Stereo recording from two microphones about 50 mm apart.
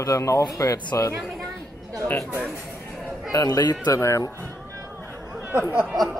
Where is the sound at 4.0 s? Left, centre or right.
Left.